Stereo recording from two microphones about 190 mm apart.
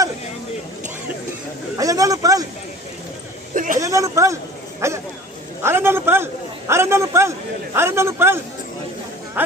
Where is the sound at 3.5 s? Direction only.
45° right (ahead or behind).